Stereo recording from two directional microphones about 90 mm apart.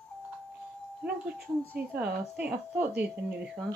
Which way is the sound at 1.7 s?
15° right (ahead or behind).